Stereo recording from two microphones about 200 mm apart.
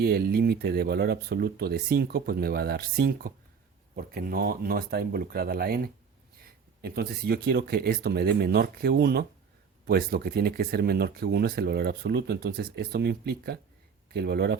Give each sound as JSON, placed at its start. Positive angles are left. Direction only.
{"t": 0.0, "sound": "speech", "side_deg": -50}